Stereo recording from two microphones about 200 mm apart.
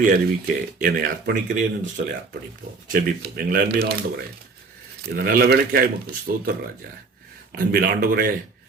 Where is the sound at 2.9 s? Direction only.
45° right (ahead or behind).